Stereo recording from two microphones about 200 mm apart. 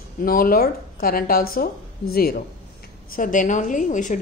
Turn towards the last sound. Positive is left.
turn(degrees=40)  # may be behind; listen again after turning